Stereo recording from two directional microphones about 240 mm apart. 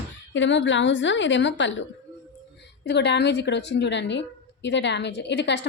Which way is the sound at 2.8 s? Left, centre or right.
Left.